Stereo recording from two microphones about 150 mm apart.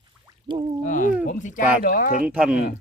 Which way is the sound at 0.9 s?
60° left (ahead or behind).